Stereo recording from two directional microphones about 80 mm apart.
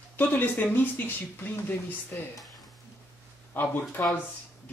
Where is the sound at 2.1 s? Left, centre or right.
Left.